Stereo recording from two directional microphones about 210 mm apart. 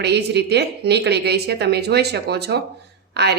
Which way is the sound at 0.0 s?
50° right (ahead or behind).